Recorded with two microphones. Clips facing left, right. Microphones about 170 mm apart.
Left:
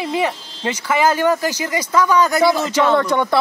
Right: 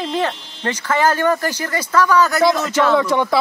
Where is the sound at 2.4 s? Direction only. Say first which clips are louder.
Even; centre (ahead or behind).